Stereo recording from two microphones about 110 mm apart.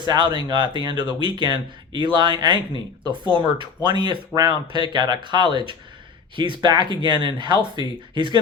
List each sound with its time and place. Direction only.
0.0 s speech: 45° right (ahead or behind)